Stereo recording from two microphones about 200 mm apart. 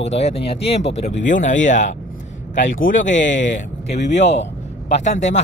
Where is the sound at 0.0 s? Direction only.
30° left (ahead or behind).